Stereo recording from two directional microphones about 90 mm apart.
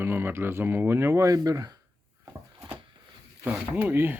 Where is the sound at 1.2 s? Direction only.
40° right (ahead or behind).